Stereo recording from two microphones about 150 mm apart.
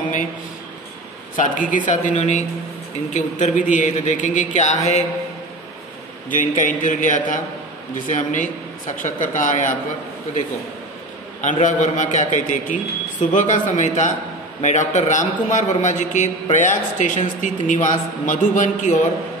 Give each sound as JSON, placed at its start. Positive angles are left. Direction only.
{"t": 1.3, "sound": "a man's voice", "side_deg": 60}
{"t": 6.3, "sound": "a man's voice", "side_deg": 60}
{"t": 11.4, "sound": "a man's voice", "side_deg": 55}